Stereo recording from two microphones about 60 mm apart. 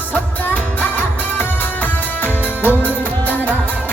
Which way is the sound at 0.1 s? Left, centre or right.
Left.